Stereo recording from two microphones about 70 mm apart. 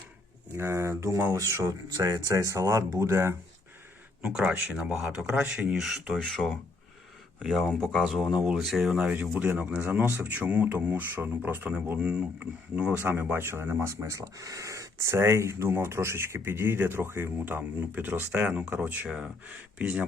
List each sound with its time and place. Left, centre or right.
0.5 s speech: right
1.6 s speech: right
4.2 s speech: centre
5.7 s speech: centre
6.1 s speech: centre
13.0 s speech: right
13.9 s speech: right
19.0 s speech: centre
19.5 s speech: right